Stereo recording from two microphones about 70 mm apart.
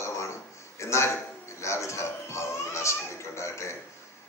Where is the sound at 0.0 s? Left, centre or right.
Left.